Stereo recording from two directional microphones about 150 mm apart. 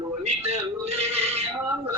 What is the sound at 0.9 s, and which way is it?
Synthetic singing, 45° right (ahead or behind).